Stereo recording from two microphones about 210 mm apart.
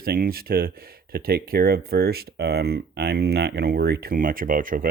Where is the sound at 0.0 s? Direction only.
45° right (ahead or behind).